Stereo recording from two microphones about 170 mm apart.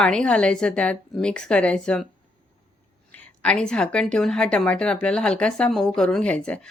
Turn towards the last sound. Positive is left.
turn(degrees=5)  # may be behind; listen again after turning